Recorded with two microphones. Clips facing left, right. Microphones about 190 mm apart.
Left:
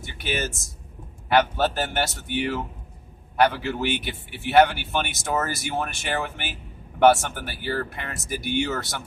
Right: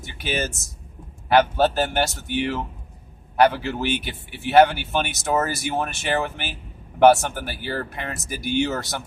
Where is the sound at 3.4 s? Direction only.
45° right (ahead or behind).